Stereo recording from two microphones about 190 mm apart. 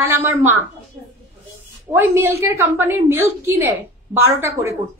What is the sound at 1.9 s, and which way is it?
A woman's voice, 15° right (ahead or behind).